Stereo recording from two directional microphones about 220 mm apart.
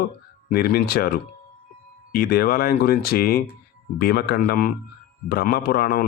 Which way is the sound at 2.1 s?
45° left (ahead or behind).